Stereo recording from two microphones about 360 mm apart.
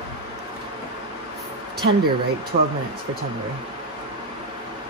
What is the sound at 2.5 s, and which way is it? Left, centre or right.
Speech, right.